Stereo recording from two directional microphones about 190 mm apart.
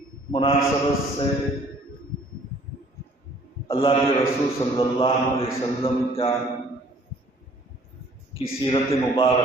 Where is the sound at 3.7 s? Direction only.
30° left (ahead or behind).